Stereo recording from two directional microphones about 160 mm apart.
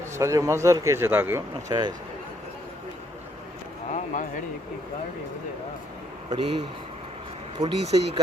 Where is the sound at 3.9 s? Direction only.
50° left (ahead or behind).